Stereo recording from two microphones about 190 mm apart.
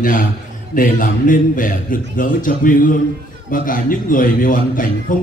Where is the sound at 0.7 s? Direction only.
45° left (ahead or behind).